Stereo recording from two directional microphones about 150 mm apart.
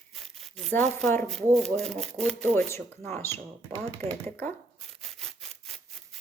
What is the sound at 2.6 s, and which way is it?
Speech, 15° left (ahead or behind).